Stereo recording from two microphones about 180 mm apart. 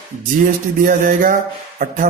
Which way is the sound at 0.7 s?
45° right (ahead or behind).